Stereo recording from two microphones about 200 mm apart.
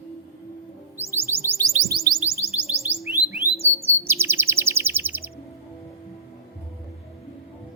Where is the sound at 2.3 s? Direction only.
10° right (ahead or behind).